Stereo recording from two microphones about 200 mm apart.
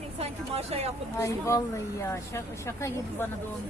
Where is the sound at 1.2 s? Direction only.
15° left (ahead or behind).